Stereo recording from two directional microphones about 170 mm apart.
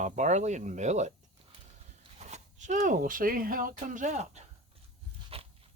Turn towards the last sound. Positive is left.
turn(degrees=-35)  # may be behind; listen again after turning